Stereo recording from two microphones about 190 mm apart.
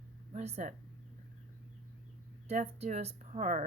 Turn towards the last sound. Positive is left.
turn(degrees=-40)  # may be behind; listen again after turning